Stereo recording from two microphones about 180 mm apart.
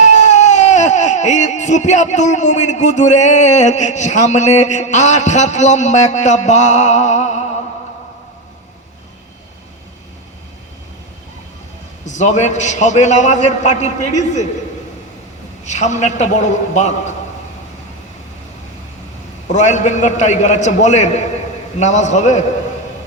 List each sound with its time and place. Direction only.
0.0 s speech: 40° left (ahead or behind)
12.0 s a man's voice: 40° left (ahead or behind)
15.6 s a man's voice: 40° left (ahead or behind)
19.5 s a man's voice: 40° left (ahead or behind)